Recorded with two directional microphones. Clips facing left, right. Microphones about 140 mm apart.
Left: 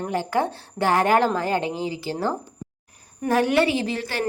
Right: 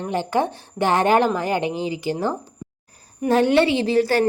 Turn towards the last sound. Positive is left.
turn(degrees=-40)  # may be behind; listen again after turning